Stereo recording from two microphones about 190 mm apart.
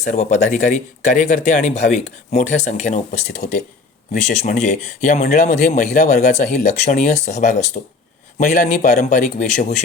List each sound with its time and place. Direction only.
0.0 s speech: 40° left (ahead or behind)
4.6 s a man's voice: 40° left (ahead or behind)